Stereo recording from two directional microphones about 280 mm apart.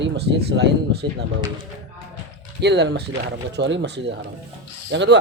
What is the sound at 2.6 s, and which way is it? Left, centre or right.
Speech, right.